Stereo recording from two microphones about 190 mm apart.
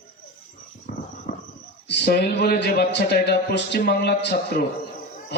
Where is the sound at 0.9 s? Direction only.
45° left (ahead or behind).